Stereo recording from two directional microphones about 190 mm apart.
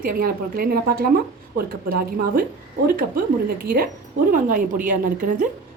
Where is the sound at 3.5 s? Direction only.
50° right (ahead or behind).